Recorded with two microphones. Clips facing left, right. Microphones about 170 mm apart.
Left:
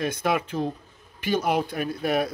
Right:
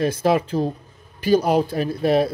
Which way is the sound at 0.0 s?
30° right (ahead or behind).